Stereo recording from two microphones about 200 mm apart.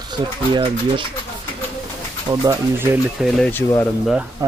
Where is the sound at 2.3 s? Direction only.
15° right (ahead or behind).